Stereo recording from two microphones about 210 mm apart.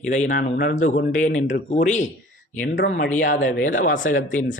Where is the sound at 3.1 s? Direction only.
35° left (ahead or behind).